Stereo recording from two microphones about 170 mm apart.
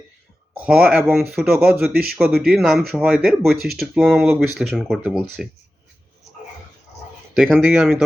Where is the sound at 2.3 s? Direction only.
Centre (ahead or behind).